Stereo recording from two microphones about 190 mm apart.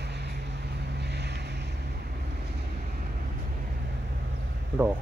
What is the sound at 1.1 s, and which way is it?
Boat, 60° right (ahead or behind).